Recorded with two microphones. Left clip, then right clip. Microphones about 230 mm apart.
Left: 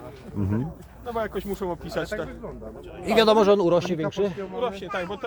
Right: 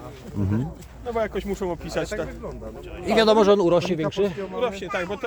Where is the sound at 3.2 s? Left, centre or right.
Centre.